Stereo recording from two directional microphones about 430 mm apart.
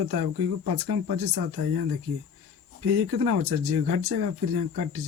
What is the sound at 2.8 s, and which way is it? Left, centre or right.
Speech, right.